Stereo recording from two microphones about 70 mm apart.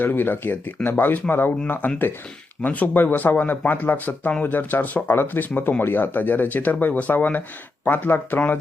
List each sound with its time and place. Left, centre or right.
0.0 s speech: left